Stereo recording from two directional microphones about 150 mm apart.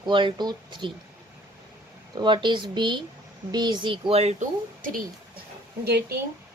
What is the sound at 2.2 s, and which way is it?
Speech, 30° right (ahead or behind).